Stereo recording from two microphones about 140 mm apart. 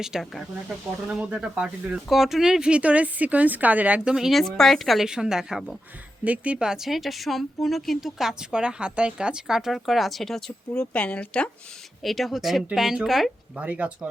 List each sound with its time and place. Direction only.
0.0 s speech: centre (ahead or behind)